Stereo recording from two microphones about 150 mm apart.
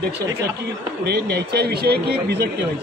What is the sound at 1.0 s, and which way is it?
Speech, 90° right.